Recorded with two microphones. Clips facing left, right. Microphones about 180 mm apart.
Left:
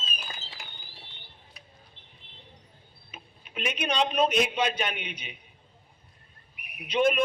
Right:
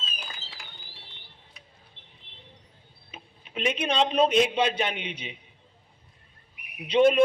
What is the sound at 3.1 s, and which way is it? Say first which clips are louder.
Speech: right 3 dB; 25° right (ahead or behind).